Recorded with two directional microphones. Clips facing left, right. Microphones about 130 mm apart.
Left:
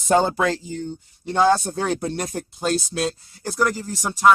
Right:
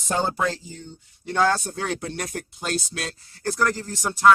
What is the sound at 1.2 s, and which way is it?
Speech, 20° left (ahead or behind).